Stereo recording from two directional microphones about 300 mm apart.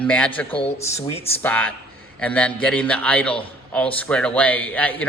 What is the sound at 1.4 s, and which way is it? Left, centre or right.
Speech, centre.